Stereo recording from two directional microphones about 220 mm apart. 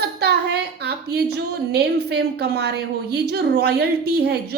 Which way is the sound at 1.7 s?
50° right (ahead or behind).